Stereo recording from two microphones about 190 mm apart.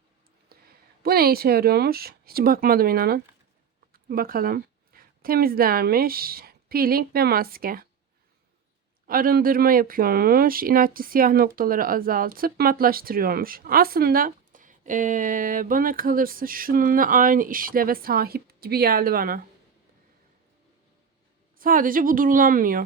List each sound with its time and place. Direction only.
0.4 s a woman's voice: 55° right (ahead or behind)
9.0 s speech: 50° right (ahead or behind)
21.6 s speech: 45° right (ahead or behind)